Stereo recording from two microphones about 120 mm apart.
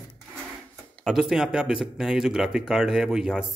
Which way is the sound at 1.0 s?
5° right (ahead or behind).